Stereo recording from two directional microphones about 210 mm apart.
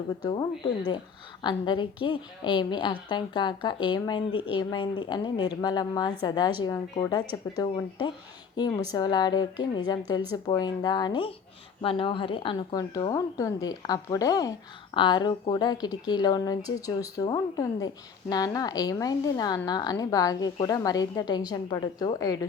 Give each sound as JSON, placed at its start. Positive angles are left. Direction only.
{"t": 0.3, "sound": "a woman's voice", "side_deg": 20}